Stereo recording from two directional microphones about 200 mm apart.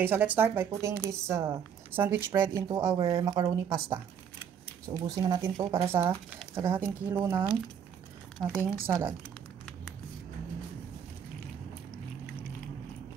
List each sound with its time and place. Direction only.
0.0 s a woman's voice: 10° right (ahead or behind)
5.0 s a woman's voice: 20° right (ahead or behind)
8.4 s speech: centre (ahead or behind)
8.8 s a woman's voice: 10° right (ahead or behind)